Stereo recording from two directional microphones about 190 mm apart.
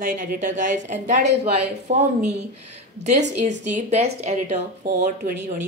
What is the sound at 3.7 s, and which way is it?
Speech, 35° right (ahead or behind).